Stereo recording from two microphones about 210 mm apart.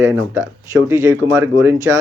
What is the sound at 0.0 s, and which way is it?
Speech, 10° right (ahead or behind).